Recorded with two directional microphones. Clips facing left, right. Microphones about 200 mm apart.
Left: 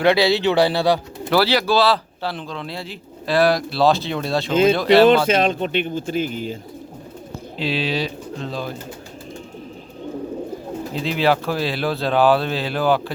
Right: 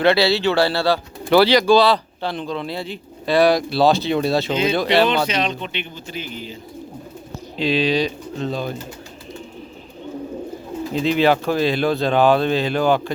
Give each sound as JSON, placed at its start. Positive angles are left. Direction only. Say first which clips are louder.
{"t": 0.0, "sound": "speech", "louder": "even", "side_deg": 15}
{"t": 1.3, "sound": "speech", "louder": "right 4 dB", "side_deg": 5}
{"t": 5.0, "sound": "speech", "louder": "left 6 dB", "side_deg": 50}
{"t": 7.6, "sound": "speech", "louder": "right 4 dB", "side_deg": 5}
{"t": 10.9, "sound": "speech", "louder": "right 3 dB", "side_deg": 0}